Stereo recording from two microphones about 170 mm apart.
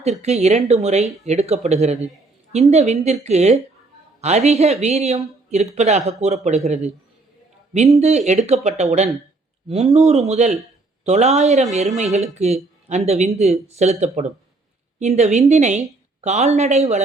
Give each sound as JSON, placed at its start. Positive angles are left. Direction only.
{"t": 0.0, "sound": "speech", "side_deg": -40}
{"t": 7.9, "sound": "speech", "side_deg": -40}